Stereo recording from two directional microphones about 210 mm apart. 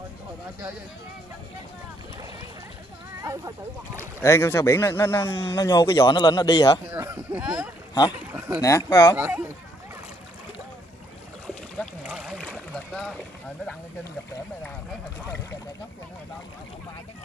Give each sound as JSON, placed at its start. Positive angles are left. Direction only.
{"t": 3.2, "sound": "speech", "side_deg": -15}
{"t": 4.2, "sound": "speech", "side_deg": 10}
{"t": 6.9, "sound": "speech", "side_deg": -15}
{"t": 8.3, "sound": "a sound", "side_deg": -10}
{"t": 8.5, "sound": "speech", "side_deg": 15}
{"t": 9.1, "sound": "speech", "side_deg": -10}
{"t": 11.4, "sound": "boat", "side_deg": 0}